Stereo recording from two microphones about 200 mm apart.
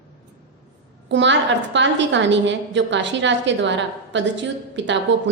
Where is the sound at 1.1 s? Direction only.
65° right (ahead or behind).